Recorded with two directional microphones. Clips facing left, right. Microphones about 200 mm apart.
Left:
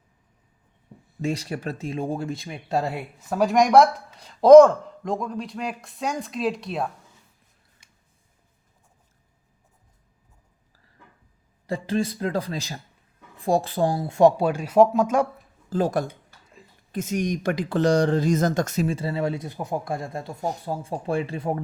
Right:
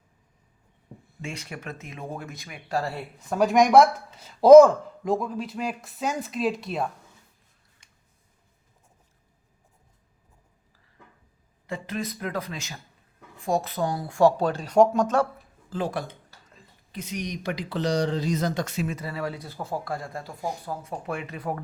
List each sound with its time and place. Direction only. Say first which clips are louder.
1.2 s speech: left 9 dB; 35° left (ahead or behind); by 3.1 s 20° left (ahead or behind)
3.2 s speech: even; centre (ahead or behind)
11.6 s speech: left 7 dB; 35° left (ahead or behind); by 15.3 s 10° left (ahead or behind)
15.7 s speech: left 6 dB; 40° left (ahead or behind); by 21.6 s 25° left (ahead or behind)